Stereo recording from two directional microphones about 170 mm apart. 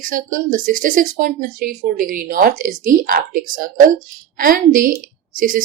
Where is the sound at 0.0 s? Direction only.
55° right (ahead or behind).